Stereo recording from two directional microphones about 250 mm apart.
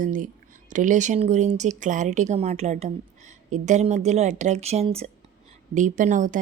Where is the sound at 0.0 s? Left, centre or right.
Right.